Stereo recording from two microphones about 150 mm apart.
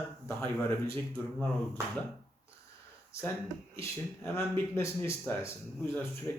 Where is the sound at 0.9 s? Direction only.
15° left (ahead or behind).